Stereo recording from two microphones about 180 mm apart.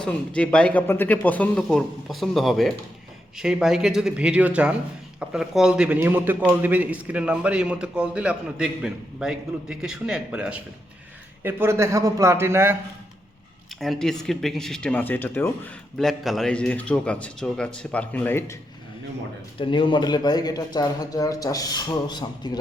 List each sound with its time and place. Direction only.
0.0 s a man's voice: 5° left (ahead or behind); by 12.7 s 15° right (ahead or behind)
13.7 s speech: centre (ahead or behind)
19.5 s a man's voice: 30° left (ahead or behind)